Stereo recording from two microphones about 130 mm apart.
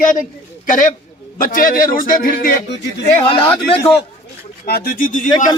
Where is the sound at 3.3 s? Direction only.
40° left (ahead or behind).